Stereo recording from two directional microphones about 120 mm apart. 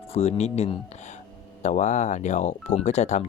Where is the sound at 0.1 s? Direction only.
65° left (ahead or behind).